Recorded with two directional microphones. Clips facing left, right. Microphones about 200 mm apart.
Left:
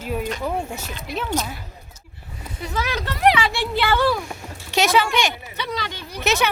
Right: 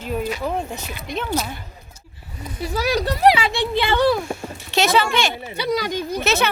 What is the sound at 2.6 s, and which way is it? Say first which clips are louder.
Speech: right 5 dB; 35° right (ahead or behind).